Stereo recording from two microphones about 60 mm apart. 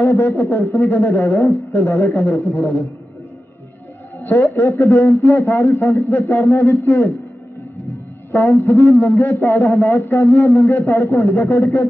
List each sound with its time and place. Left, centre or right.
0.0 s a man's voice: left
4.2 s a man's voice: left
8.4 s a man's voice: left